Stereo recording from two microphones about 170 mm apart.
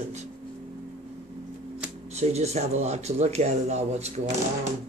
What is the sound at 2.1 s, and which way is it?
Speech, 40° right (ahead or behind).